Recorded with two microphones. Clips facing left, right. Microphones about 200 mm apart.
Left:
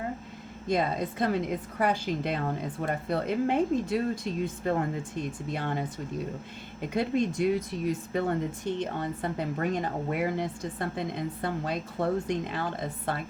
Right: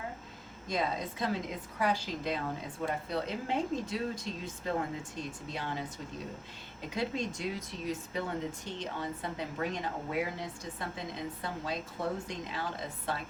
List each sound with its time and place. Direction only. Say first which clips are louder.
0.7 s speech: left 6 dB; 55° left (ahead or behind)
6.9 s speech: left 7 dB; 55° left (ahead or behind)